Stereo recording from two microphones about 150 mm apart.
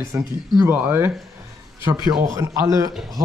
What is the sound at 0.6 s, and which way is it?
Speech, 15° right (ahead or behind).